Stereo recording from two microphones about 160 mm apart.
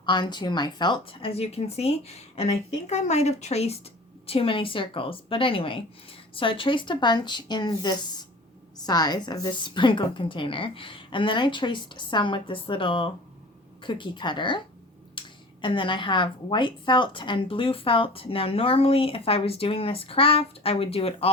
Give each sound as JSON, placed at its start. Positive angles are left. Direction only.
{"t": 0.0, "sound": "a woman's voice", "side_deg": 30}
{"t": 15.2, "sound": "a sound", "side_deg": 30}
{"t": 15.6, "sound": "a woman's voice", "side_deg": 30}